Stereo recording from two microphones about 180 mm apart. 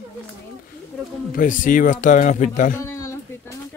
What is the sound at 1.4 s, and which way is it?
Speech, 45° left (ahead or behind).